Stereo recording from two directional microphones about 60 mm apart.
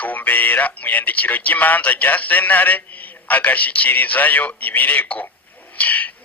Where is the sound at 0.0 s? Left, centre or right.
Left.